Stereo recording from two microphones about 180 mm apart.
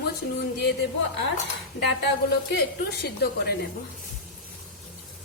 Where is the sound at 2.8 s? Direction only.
60° left (ahead or behind).